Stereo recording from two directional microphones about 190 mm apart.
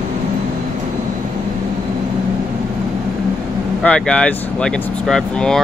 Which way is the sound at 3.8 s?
5° left (ahead or behind).